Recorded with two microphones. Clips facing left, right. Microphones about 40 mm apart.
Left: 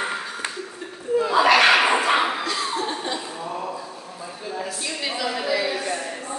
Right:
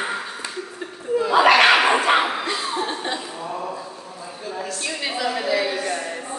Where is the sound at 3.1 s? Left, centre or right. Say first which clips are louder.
Right 1 dB; centre.